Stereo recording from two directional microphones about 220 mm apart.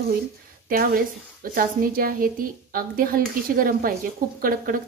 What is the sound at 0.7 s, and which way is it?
A woman's voice, 40° right (ahead or behind).